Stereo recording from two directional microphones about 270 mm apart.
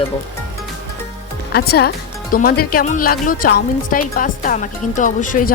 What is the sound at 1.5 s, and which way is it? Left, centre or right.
Speech, left.